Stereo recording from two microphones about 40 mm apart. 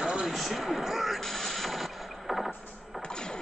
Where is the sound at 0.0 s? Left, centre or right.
Right.